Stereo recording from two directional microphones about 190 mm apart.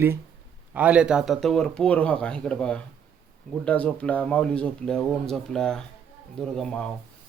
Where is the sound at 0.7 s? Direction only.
5° right (ahead or behind).